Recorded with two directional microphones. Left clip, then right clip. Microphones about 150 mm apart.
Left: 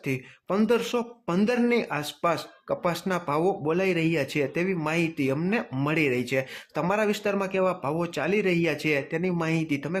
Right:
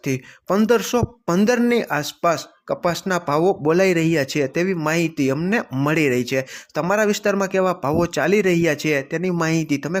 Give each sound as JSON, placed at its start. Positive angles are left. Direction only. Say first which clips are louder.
{"t": 0.4, "sound": "speech", "louder": "right 6 dB", "side_deg": -35}